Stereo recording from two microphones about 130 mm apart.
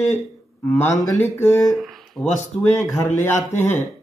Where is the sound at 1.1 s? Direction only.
20° left (ahead or behind).